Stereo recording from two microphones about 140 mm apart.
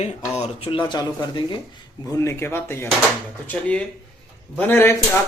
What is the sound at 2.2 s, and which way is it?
Speech, 15° left (ahead or behind).